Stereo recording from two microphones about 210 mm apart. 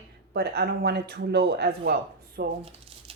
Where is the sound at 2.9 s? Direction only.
25° right (ahead or behind).